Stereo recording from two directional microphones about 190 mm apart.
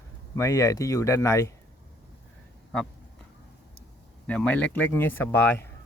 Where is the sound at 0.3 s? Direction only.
15° left (ahead or behind).